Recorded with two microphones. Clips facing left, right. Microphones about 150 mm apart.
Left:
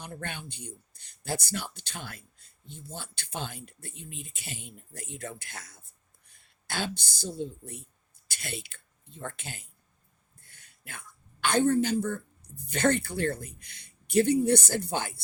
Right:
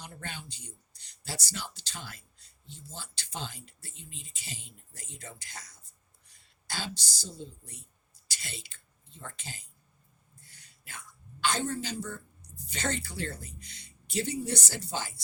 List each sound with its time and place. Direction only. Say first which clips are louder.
0.0 s speech: left 4 dB; 55° left (ahead or behind)